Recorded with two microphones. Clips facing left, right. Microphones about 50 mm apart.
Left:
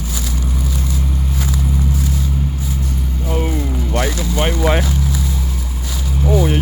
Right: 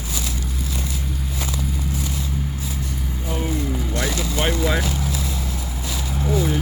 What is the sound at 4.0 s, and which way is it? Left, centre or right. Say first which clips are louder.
Vehicle: left 5 dB; left.